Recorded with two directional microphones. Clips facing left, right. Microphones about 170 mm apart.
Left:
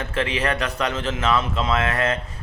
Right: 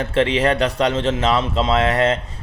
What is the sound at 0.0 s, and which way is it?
A man's voice, 30° right (ahead or behind).